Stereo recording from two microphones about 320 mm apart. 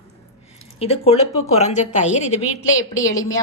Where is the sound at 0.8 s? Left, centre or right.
Centre.